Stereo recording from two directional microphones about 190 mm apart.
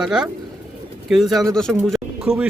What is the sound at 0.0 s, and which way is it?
Speech, 5° right (ahead or behind).